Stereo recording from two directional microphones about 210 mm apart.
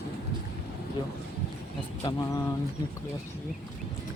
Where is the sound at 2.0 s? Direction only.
20° left (ahead or behind).